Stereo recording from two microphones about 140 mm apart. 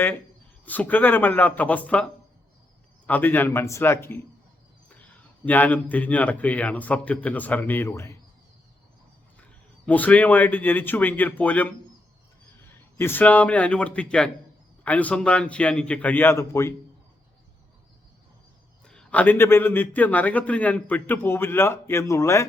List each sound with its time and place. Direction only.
0.6 s a man's voice: 10° left (ahead or behind)
3.1 s a man's voice: 15° left (ahead or behind)
9.8 s a man's voice: 10° left (ahead or behind)
13.0 s a man's voice: 15° left (ahead or behind)
18.9 s a man's voice: 10° left (ahead or behind)